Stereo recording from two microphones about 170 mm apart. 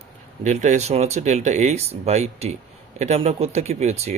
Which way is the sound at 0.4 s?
45° right (ahead or behind).